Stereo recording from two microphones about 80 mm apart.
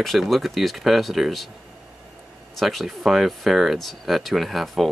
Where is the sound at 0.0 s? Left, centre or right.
Centre.